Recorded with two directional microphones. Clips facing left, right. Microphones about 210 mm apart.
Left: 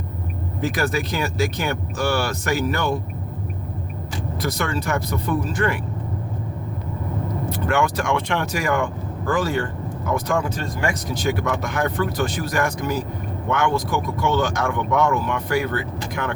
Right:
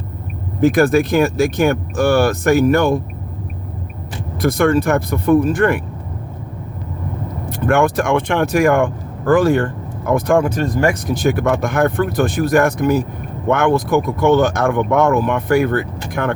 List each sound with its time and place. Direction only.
0.6 s speech: 55° right (ahead or behind)
4.4 s speech: 55° right (ahead or behind)
7.7 s speech: 55° right (ahead or behind)